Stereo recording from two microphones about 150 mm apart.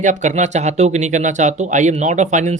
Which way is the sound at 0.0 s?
55° right (ahead or behind).